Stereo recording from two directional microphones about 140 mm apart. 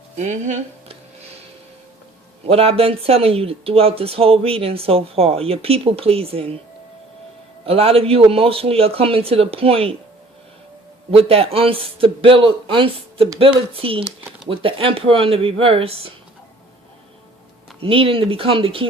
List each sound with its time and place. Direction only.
0.2 s speech: 60° right (ahead or behind)
2.5 s speech: 45° right (ahead or behind)
7.6 s speech: 45° right (ahead or behind)
11.1 s a man's voice: 45° right (ahead or behind)
17.7 s a man's voice: 40° right (ahead or behind)